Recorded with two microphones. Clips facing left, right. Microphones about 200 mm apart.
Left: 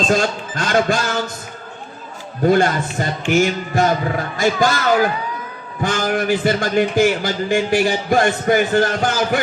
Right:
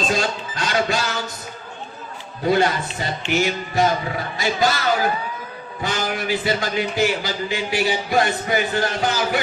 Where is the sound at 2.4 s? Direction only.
50° left (ahead or behind).